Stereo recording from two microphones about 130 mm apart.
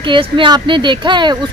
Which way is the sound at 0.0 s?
40° right (ahead or behind).